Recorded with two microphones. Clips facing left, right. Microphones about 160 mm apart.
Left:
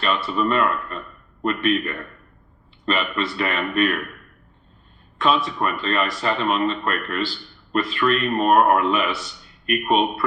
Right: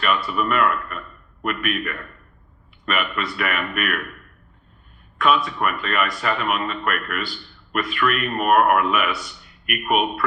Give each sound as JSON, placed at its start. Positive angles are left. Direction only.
{"t": 0.0, "sound": "speech", "side_deg": 30}
{"t": 5.1, "sound": "speech", "side_deg": 30}